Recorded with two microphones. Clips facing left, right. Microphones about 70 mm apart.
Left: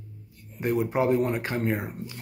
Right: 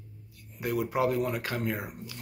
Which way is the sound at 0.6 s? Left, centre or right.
Left.